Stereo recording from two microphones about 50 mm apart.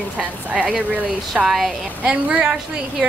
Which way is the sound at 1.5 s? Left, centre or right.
Centre.